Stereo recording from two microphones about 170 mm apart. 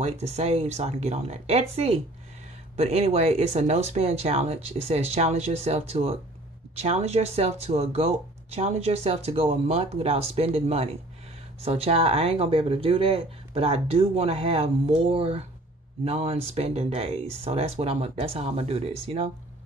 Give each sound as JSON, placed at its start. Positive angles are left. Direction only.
{"t": 0.0, "sound": "speech", "side_deg": -40}